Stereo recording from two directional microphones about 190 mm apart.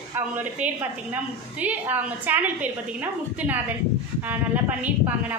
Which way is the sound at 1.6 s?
10° right (ahead or behind).